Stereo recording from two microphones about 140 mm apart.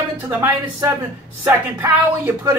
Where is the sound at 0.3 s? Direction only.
20° right (ahead or behind).